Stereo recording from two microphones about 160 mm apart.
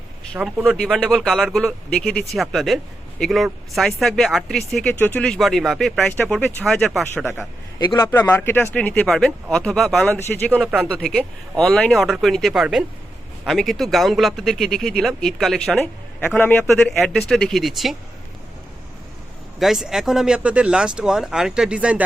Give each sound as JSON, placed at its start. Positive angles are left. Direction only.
{"t": 0.3, "sound": "speech", "side_deg": -5}
{"t": 7.9, "sound": "speech", "side_deg": 15}
{"t": 19.5, "sound": "speech", "side_deg": 0}